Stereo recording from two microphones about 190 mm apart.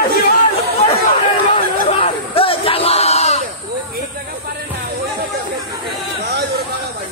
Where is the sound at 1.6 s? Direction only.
30° left (ahead or behind).